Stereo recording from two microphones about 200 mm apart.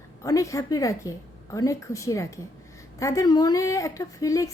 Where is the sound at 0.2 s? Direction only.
15° left (ahead or behind).